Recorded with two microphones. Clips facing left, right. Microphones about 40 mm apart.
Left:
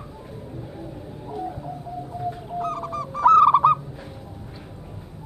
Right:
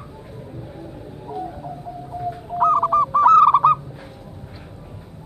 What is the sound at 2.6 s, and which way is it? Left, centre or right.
Owl, right.